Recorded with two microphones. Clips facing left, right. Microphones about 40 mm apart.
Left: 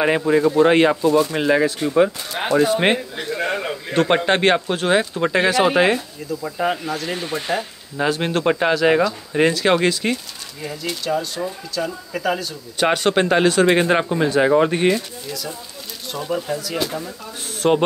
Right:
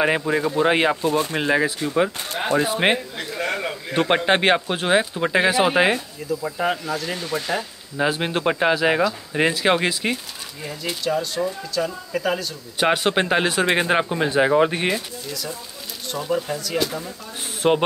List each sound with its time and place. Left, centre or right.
0.0 s speech: centre
1.0 s speech: right
1.3 s speech: centre
3.2 s a sound: left
3.9 s speech: centre
17.6 s speech: centre